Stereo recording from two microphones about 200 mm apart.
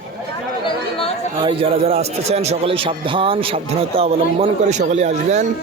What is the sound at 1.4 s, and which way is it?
A man's voice, 25° right (ahead or behind).